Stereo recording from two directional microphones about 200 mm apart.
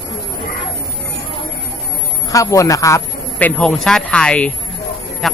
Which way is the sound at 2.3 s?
15° left (ahead or behind).